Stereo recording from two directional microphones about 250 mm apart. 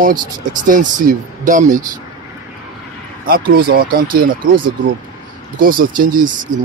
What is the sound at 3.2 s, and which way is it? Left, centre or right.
Speech, right.